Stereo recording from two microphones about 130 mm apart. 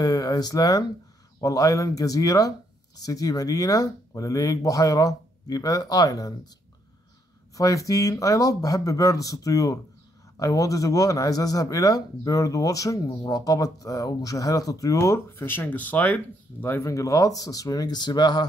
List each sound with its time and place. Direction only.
0.0 s speech: 30° left (ahead or behind)
7.5 s speech: 25° left (ahead or behind)